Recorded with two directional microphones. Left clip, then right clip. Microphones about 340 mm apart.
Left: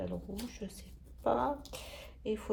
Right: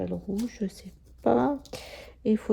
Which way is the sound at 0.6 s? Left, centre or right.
Right.